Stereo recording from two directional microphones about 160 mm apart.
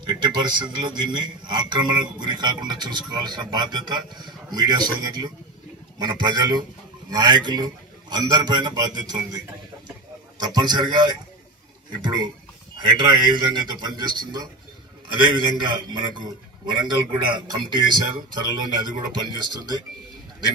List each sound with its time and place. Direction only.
0.0 s a man's voice: 25° right (ahead or behind)